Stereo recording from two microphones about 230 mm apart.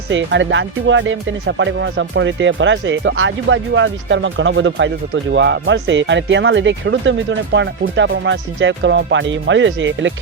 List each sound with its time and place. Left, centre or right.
0.1 s speech: right